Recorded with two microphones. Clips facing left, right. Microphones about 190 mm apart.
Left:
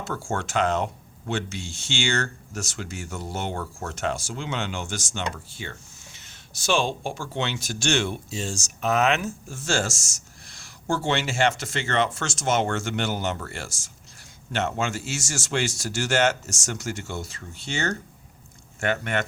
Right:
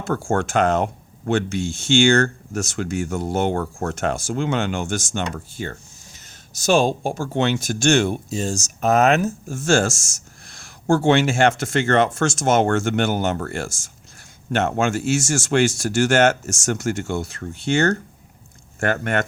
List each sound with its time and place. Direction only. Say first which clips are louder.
0.0 s speech: right 8 dB; 50° right (ahead or behind)